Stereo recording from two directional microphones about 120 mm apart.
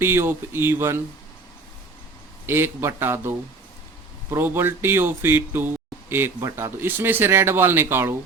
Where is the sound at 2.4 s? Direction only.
20° right (ahead or behind).